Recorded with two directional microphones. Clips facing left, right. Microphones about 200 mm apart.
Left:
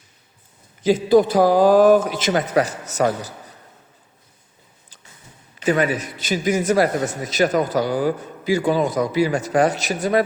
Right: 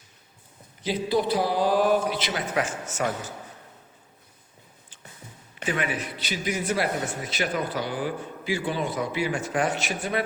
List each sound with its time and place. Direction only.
0.9 s speech: 45° left (ahead or behind)
5.6 s a man's voice: 40° left (ahead or behind)